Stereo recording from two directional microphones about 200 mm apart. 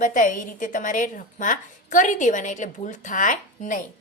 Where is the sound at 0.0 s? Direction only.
40° left (ahead or behind).